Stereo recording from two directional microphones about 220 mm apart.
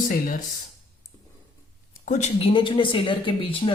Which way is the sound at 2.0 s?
30° left (ahead or behind).